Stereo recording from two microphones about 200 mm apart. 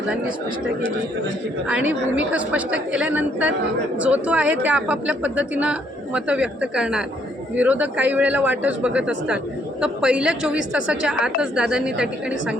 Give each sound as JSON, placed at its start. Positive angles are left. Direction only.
{"t": 1.9, "sound": "a woman's voice", "side_deg": -5}